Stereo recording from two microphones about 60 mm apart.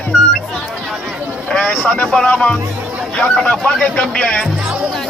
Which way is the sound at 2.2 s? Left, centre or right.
Centre.